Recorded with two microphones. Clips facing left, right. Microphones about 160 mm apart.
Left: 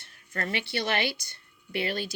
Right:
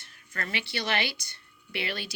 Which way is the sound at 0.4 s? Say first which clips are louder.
Left 3 dB; 55° left (ahead or behind).